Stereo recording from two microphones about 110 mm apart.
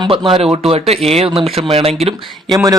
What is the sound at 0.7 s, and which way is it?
Speech, 65° right (ahead or behind).